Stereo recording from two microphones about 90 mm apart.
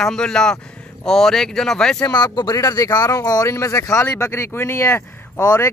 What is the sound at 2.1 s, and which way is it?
Speech, 50° left (ahead or behind).